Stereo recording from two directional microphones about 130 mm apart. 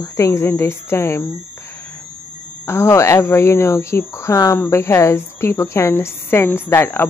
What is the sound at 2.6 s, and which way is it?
Speech, 20° left (ahead or behind).